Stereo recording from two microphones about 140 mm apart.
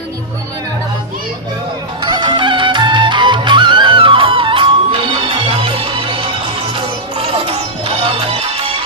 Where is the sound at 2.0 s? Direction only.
35° right (ahead or behind).